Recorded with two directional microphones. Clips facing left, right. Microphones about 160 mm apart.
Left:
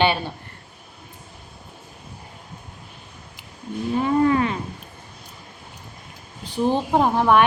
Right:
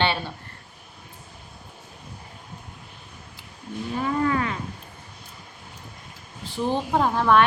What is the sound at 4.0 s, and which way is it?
Cattle, 25° left (ahead or behind).